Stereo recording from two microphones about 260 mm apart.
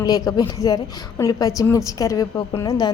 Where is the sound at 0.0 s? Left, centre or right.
Centre.